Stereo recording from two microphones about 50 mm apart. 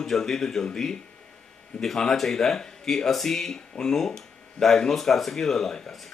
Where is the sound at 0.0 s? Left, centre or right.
Centre.